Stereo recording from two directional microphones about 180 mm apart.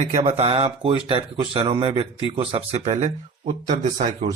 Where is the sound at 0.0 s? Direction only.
35° right (ahead or behind).